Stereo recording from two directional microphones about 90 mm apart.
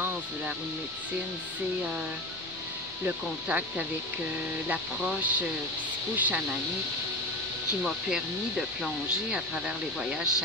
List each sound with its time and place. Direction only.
3.1 s speech: 15° right (ahead or behind)
7.8 s speech: 5° right (ahead or behind)